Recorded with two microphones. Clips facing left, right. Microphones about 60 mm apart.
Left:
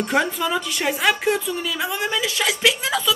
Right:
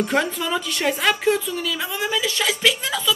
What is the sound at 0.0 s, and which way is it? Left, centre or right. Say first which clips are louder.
Speech: left 1 dB; centre.